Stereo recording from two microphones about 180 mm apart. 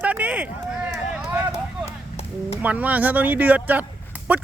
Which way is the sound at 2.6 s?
10° right (ahead or behind).